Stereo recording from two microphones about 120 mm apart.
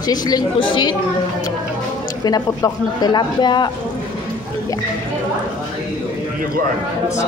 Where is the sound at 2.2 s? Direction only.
35° left (ahead or behind).